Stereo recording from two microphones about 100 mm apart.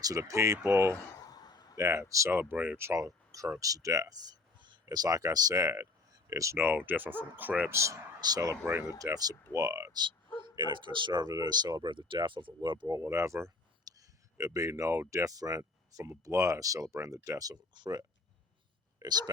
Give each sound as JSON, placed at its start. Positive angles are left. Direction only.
{"t": 0.0, "sound": "speech", "side_deg": -35}
{"t": 1.2, "sound": "a sound", "side_deg": 40}
{"t": 1.7, "sound": "speech", "side_deg": -30}
{"t": 2.4, "sound": "speech", "side_deg": -15}
{"t": 6.7, "sound": "speech", "side_deg": -15}
{"t": 7.7, "sound": "speech", "side_deg": -30}
{"t": 10.4, "sound": "speech", "side_deg": -50}
{"t": 12.9, "sound": "a woman's voice", "side_deg": -30}